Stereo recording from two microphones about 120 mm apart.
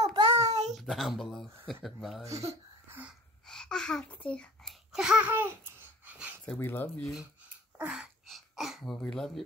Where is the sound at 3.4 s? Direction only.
5° left (ahead or behind).